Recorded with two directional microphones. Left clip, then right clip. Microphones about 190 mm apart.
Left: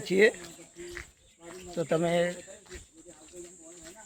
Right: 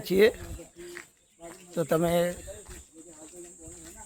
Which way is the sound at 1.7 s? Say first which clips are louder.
Right 2 dB; 20° right (ahead or behind).